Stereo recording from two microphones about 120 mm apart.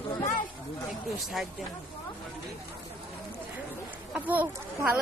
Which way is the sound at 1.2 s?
Centre (ahead or behind).